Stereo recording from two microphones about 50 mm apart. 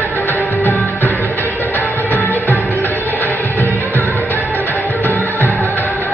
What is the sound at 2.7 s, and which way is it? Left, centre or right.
Music, left.